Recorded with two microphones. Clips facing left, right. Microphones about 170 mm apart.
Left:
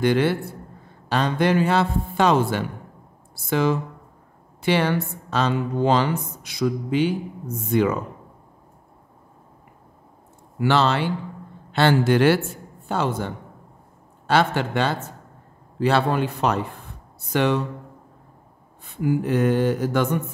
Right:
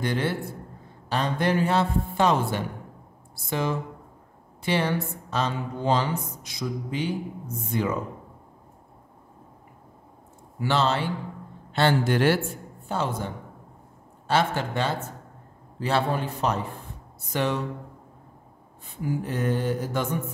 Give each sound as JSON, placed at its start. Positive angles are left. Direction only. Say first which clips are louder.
{"t": 0.0, "sound": "a man's voice", "louder": "left 7 dB", "side_deg": 75}
{"t": 4.6, "sound": "speech", "louder": "left 4 dB", "side_deg": 80}
{"t": 10.6, "sound": "a man's voice", "louder": "left 4 dB", "side_deg": 75}
{"t": 19.0, "sound": "speech", "louder": "left 7 dB", "side_deg": 75}